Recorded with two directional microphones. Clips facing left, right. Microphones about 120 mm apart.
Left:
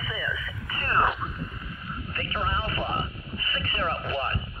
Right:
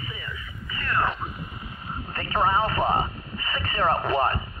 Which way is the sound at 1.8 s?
30° right (ahead or behind).